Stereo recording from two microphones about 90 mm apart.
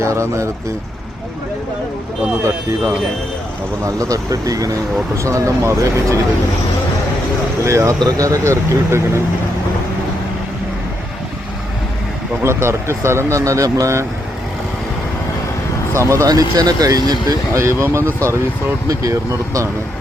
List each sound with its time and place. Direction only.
0.0 s speech: 35° right (ahead or behind)
2.4 s speech: 30° right (ahead or behind)
7.6 s speech: 35° right (ahead or behind)
12.4 s speech: 30° right (ahead or behind)
16.0 s speech: 35° right (ahead or behind)
17.6 s speech: 30° right (ahead or behind)